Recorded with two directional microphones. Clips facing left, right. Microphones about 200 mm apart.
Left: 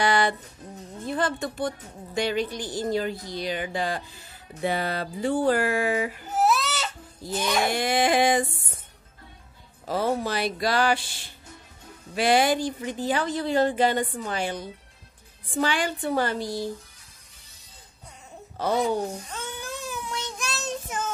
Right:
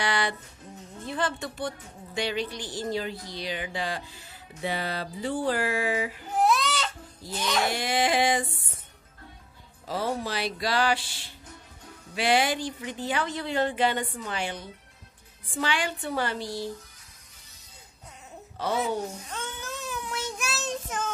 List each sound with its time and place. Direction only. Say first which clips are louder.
0.0 s music: left 5 dB; 45° left (ahead or behind)
1.0 s speech: left 3 dB; 45° left (ahead or behind)
6.3 s crying: even; 5° left (ahead or behind)
7.3 s speech: left 3 dB; 10° left (ahead or behind)
7.7 s speech: left 3 dB; 50° left (ahead or behind)
9.8 s speech: left 4 dB; 50° left (ahead or behind)
12.2 s speech: left 4 dB; 45° left (ahead or behind)
18.8 s speech: left 4 dB; centre (ahead or behind)
20.1 s child singing: even; 5° right (ahead or behind)